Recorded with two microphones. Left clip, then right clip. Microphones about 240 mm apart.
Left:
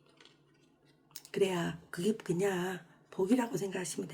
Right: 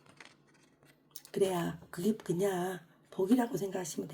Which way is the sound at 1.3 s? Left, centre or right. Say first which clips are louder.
Even; centre.